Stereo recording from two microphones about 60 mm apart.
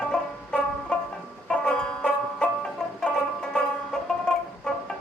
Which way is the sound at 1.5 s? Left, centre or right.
Centre.